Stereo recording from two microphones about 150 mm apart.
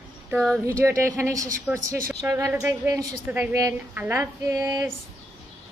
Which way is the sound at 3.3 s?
10° right (ahead or behind).